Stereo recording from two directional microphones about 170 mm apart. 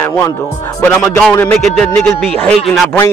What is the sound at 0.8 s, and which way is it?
Music, 15° left (ahead or behind).